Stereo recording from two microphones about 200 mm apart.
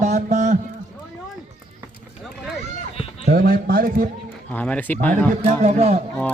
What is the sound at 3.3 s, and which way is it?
Speech, 45° right (ahead or behind).